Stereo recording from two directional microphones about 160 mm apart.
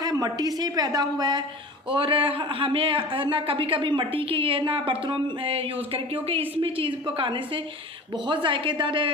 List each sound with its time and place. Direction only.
0.0 s a woman's voice: 25° right (ahead or behind)